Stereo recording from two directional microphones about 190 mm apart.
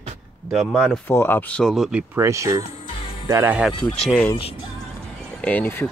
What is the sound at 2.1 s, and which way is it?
Speech, 15° right (ahead or behind).